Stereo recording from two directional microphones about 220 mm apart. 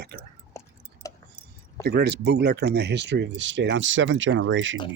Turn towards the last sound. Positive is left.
turn(degrees=-60)  # may be behind; listen again after turning